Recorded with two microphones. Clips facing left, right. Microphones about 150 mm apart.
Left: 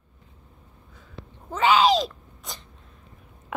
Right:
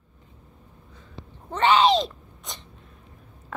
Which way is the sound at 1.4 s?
5° left (ahead or behind).